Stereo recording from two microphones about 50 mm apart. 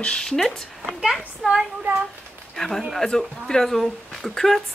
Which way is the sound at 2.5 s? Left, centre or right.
Centre.